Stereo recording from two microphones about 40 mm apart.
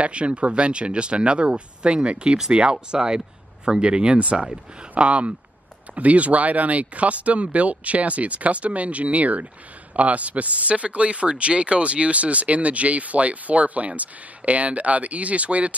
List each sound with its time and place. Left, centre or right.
0.0 s speech: right